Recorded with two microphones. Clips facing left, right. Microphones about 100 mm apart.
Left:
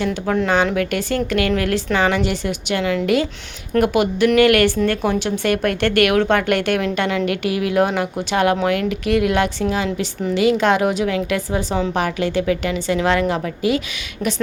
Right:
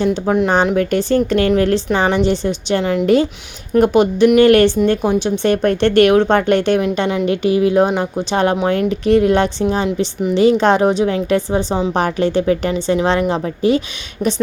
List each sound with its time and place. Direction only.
0.0 s a woman's voice: 25° right (ahead or behind)